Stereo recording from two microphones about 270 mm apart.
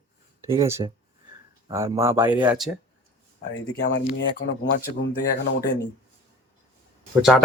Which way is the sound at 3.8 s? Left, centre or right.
Left.